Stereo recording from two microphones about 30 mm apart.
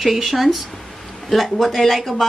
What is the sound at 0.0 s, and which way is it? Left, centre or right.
Speech, centre.